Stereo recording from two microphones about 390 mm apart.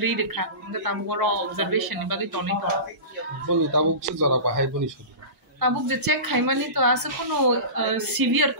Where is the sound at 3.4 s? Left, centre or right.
Right.